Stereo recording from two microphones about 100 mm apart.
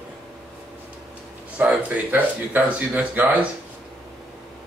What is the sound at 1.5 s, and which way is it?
Speech, 15° right (ahead or behind).